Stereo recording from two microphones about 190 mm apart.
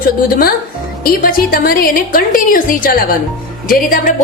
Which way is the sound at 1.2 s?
50° left (ahead or behind).